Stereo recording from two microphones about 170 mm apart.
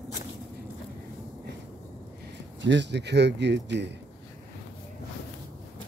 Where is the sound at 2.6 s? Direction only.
90° right.